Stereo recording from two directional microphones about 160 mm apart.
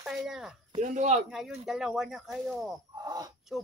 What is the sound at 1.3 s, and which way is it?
Speech, centre (ahead or behind).